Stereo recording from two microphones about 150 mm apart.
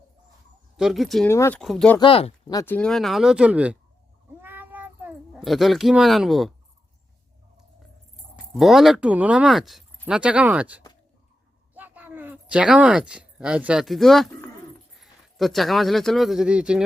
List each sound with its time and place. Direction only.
0.8 s speech: centre (ahead or behind)
1.3 s speech: 15° left (ahead or behind)
1.5 s speech: 5° left (ahead or behind)
2.0 s speech: 35° left (ahead or behind)
2.6 s speech: 10° left (ahead or behind); by 3.8 s 10° right (ahead or behind)
4.4 s cat: 15° right (ahead or behind)
5.4 s speech: centre (ahead or behind)
8.1 s speech: centre (ahead or behind)